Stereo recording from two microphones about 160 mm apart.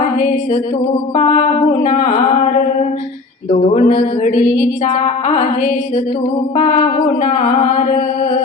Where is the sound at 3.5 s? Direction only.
45° left (ahead or behind).